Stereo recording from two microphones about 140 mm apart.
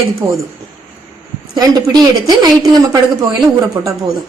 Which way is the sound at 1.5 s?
30° right (ahead or behind).